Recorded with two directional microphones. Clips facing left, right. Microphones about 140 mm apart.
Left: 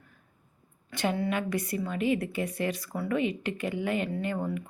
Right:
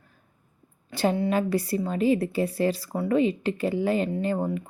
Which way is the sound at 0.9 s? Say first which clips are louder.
Right 5 dB; 30° right (ahead or behind).